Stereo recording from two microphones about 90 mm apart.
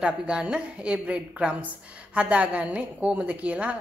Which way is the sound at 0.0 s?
10° right (ahead or behind).